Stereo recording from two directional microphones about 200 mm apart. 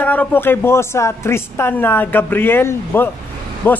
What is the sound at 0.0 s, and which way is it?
A woman's voice, 10° left (ahead or behind).